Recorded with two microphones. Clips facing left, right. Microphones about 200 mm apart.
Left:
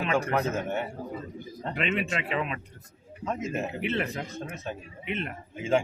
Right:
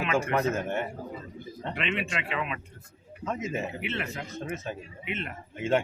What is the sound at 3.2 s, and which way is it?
Speech, centre (ahead or behind).